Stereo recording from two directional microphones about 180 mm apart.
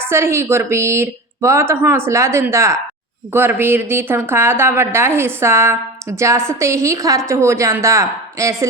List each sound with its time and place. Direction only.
0.0 s a woman's voice: 15° right (ahead or behind)